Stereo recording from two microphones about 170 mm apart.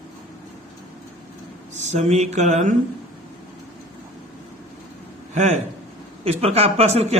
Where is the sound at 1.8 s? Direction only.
40° right (ahead or behind).